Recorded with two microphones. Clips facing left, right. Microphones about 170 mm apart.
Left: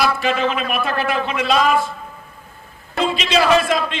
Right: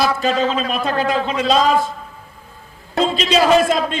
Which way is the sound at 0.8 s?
20° right (ahead or behind).